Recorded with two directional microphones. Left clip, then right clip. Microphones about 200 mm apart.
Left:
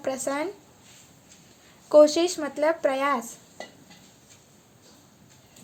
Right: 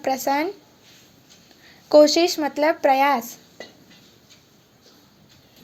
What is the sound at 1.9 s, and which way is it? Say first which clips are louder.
Speech: right 3 dB; 10° right (ahead or behind).